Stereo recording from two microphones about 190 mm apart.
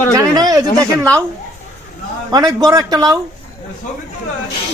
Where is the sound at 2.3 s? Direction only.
20° right (ahead or behind).